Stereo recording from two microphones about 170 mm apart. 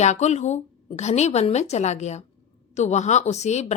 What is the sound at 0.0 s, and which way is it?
A woman's voice, 40° left (ahead or behind).